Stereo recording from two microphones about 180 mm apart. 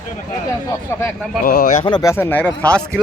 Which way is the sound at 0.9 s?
15° left (ahead or behind).